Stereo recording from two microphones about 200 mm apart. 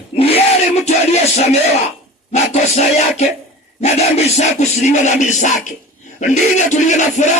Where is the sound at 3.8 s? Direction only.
35° left (ahead or behind).